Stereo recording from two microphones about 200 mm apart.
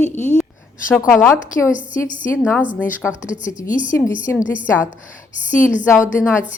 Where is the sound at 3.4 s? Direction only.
40° left (ahead or behind).